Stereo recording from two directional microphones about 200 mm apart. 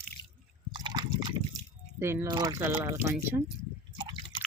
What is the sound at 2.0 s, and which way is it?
Speech, 10° right (ahead or behind).